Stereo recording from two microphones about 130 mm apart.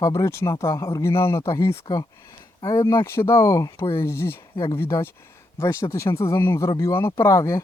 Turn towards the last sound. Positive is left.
turn(degrees=25)  # may be behind; listen again after turning